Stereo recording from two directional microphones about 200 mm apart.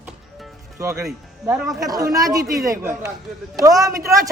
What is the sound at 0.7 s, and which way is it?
Speech, 15° right (ahead or behind).